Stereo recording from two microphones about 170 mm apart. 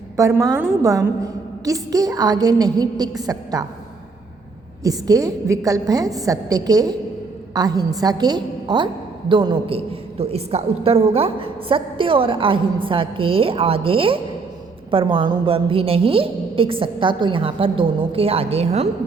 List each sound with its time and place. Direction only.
0.2 s a woman's voice: 20° right (ahead or behind)
4.8 s a woman's voice: 20° right (ahead or behind); by 18.9 s 35° right (ahead or behind)